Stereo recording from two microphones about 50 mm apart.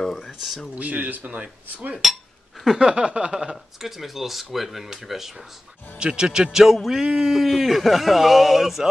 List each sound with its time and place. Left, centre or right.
0.0 s speech: centre
0.7 s speech: right
2.6 s a sound: centre
2.9 s a man's voice: centre
5.9 s a man's voice: centre